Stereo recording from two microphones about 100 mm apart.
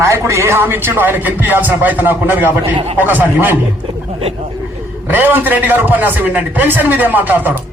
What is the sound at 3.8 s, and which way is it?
Speech, 80° right.